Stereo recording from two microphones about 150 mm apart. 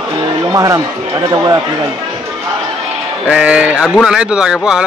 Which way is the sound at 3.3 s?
10° right (ahead or behind).